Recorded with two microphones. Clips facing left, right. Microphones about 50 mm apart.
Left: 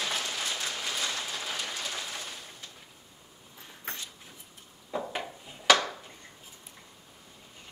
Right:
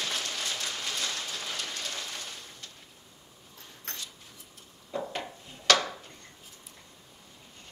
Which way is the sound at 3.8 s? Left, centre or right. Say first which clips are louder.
Left 2 dB; centre.